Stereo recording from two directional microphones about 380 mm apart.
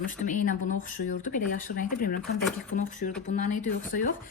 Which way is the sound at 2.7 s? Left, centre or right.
Left.